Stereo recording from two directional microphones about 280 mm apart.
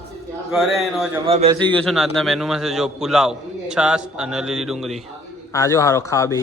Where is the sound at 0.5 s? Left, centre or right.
Centre.